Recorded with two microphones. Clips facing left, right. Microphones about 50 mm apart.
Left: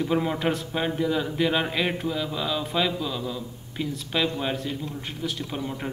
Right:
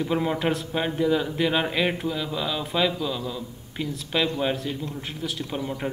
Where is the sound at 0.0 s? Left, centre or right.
Centre.